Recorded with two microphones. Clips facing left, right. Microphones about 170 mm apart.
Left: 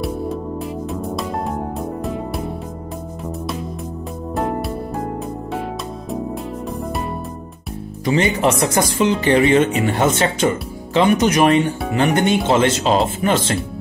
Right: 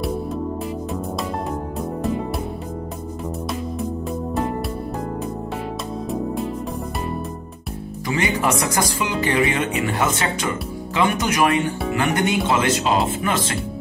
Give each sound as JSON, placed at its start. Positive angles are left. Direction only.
{"t": 1.8, "sound": "music", "side_deg": 0}
{"t": 4.4, "sound": "music", "side_deg": 0}
{"t": 8.0, "sound": "speech", "side_deg": 25}